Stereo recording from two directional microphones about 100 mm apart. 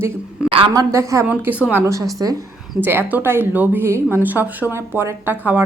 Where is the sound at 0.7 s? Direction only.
35° right (ahead or behind).